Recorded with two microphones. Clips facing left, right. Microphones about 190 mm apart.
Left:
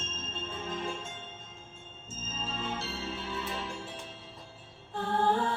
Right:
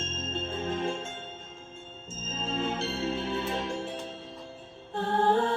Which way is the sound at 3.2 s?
25° right (ahead or behind).